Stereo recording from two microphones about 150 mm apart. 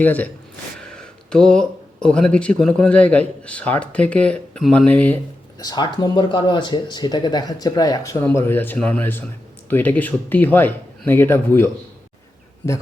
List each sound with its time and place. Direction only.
0.0 s speech: 10° left (ahead or behind)
5.5 s speech: 30° left (ahead or behind)